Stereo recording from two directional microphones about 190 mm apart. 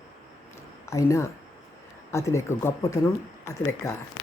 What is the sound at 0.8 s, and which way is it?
A woman's voice, 15° left (ahead or behind).